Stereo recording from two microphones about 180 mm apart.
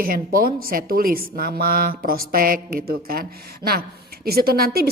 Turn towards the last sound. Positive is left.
turn(degrees=-55)  # may be behind; listen again after turning